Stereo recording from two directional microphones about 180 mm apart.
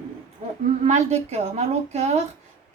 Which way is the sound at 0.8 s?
40° right (ahead or behind).